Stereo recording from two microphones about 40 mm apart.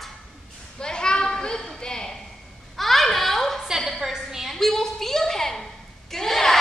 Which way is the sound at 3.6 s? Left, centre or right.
Centre.